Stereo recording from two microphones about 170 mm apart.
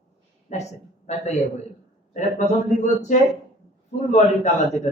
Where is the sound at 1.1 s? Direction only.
40° left (ahead or behind).